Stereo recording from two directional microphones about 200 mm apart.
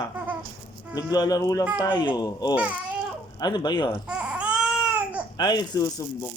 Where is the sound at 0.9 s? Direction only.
20° left (ahead or behind).